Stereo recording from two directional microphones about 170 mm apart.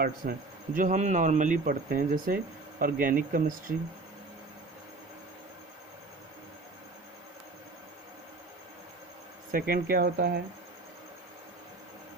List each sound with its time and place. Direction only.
0.0 s speech: 55° right (ahead or behind)
9.5 s speech: 60° right (ahead or behind)